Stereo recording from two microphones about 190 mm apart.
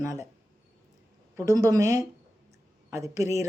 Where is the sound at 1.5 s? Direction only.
15° right (ahead or behind).